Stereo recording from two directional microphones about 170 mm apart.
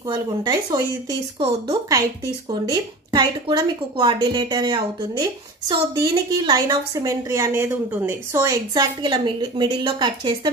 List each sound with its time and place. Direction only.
0.1 s a woman's voice: 25° right (ahead or behind)